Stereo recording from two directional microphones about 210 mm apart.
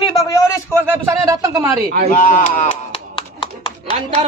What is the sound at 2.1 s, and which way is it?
Speech, 35° left (ahead or behind).